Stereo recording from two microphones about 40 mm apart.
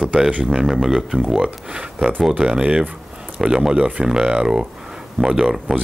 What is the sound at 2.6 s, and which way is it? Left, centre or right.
Speech, right.